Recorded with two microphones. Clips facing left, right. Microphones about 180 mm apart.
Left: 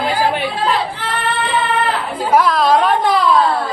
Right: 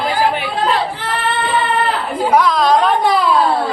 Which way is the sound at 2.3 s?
5° left (ahead or behind).